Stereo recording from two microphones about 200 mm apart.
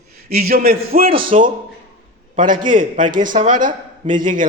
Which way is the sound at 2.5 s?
40° right (ahead or behind).